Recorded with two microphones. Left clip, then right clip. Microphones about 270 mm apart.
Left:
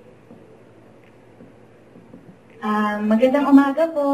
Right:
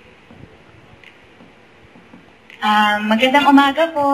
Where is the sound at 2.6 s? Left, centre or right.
Centre.